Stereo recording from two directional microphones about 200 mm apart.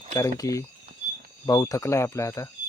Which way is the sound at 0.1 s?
15° left (ahead or behind).